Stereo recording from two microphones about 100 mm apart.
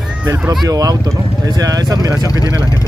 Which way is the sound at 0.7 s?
40° right (ahead or behind).